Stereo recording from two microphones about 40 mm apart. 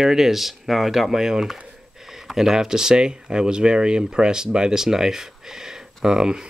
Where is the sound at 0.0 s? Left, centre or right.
Centre.